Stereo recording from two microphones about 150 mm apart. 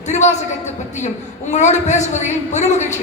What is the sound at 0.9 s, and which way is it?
A man's voice, 50° left (ahead or behind).